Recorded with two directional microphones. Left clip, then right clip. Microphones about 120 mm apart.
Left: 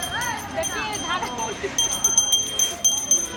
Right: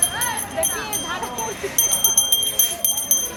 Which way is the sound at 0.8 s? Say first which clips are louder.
Left 1 dB; 10° right (ahead or behind).